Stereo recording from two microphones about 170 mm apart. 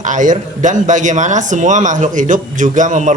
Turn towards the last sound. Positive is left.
turn(degrees=-45)  # may be behind; listen again after turning